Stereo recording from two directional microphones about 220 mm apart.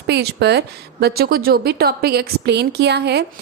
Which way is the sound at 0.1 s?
50° right (ahead or behind).